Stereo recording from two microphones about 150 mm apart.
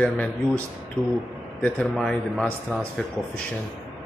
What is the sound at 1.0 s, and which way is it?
Speech, 10° right (ahead or behind).